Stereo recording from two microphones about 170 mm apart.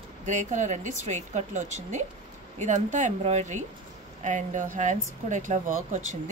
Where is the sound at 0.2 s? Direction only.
45° right (ahead or behind).